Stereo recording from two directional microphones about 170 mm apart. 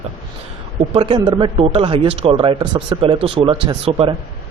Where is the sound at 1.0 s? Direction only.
30° right (ahead or behind).